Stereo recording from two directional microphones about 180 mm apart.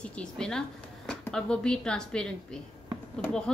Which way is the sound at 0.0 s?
5° left (ahead or behind).